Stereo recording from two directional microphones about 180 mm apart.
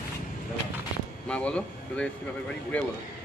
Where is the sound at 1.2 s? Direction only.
5° left (ahead or behind).